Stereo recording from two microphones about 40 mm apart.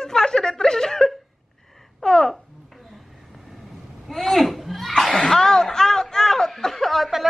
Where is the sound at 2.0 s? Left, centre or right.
Centre.